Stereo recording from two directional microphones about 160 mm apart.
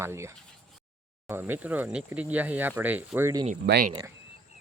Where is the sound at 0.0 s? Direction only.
15° right (ahead or behind).